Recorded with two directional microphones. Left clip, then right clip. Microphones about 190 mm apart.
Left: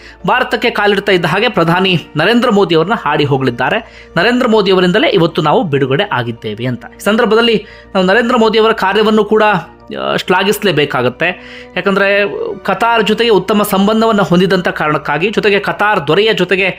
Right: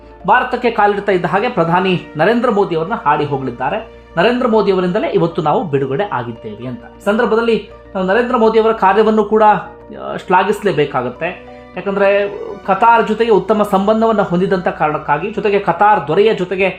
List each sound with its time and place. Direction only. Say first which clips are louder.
0.3 s a man's voice: left 1 dB; 20° left (ahead or behind)
4.4 s a man's voice: left 3 dB; 20° left (ahead or behind)
6.6 s a man's voice: left 8 dB; 30° left (ahead or behind)